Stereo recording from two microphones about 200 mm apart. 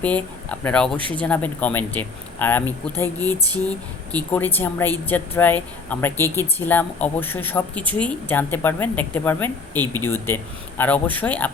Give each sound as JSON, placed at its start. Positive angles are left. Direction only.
{"t": 0.0, "sound": "speech", "side_deg": 5}
{"t": 0.9, "sound": "speech", "side_deg": -25}
{"t": 1.2, "sound": "speech", "side_deg": 5}